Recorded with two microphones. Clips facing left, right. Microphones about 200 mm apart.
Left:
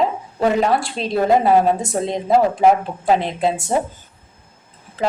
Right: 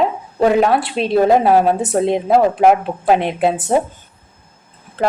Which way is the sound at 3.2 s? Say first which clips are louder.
Right 3 dB; 60° right (ahead or behind).